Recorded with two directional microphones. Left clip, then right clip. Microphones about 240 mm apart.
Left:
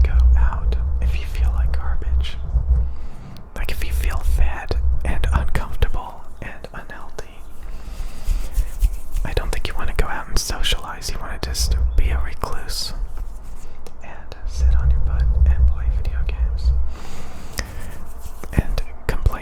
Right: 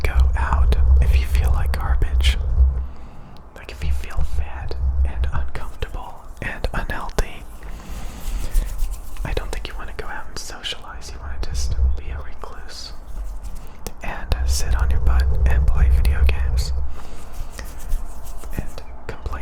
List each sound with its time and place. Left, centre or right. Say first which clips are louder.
0.0 s whispering: right 5 dB; centre
3.5 s whispering: left 5 dB; centre
6.4 s whispering: right 8 dB; centre
9.2 s whispering: left 2 dB; centre
13.8 s whispering: right 9 dB; centre
17.6 s writing: left 8 dB; centre
18.5 s whispering: left 8 dB; centre